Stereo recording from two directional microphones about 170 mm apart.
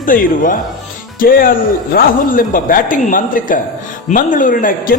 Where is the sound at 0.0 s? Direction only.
55° left (ahead or behind).